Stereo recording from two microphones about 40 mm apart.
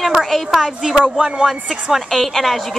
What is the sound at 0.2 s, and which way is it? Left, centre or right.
A woman's voice, centre.